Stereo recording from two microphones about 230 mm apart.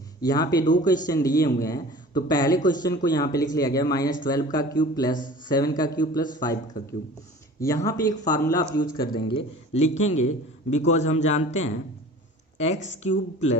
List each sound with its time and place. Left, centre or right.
0.2 s a man's voice: centre
0.6 s speech: left
1.0 s a man's voice: centre